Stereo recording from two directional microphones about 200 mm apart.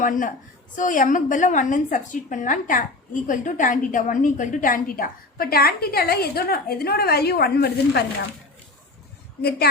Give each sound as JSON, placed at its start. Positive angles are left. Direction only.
{"t": 0.0, "sound": "a woman's voice", "side_deg": 40}
{"t": 9.4, "sound": "a woman's voice", "side_deg": 50}